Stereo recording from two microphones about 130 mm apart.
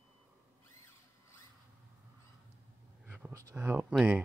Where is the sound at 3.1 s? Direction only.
15° right (ahead or behind).